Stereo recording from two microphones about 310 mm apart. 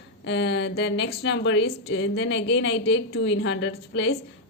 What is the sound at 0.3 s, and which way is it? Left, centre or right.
Speech, left.